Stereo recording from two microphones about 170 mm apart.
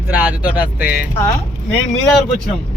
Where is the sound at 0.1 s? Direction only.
10° right (ahead or behind).